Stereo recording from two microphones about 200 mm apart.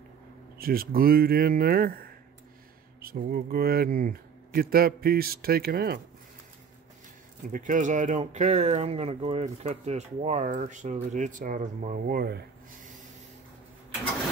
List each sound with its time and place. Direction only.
0.6 s speech: 45° right (ahead or behind)
7.5 s speech: 40° right (ahead or behind)